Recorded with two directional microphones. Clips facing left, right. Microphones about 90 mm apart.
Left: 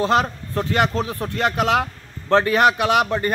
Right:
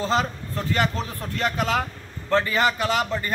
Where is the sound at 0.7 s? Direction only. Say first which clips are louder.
Left 3 dB; 75° left (ahead or behind).